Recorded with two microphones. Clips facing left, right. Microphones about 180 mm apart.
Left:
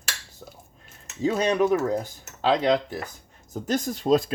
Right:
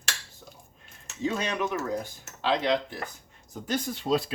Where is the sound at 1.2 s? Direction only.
40° left (ahead or behind).